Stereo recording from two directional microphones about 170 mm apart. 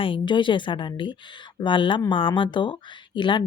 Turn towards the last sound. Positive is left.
turn(degrees=30)  # may be behind; listen again after turning